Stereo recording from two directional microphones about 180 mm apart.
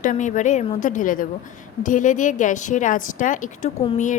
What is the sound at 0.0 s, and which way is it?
A woman's voice, 45° left (ahead or behind).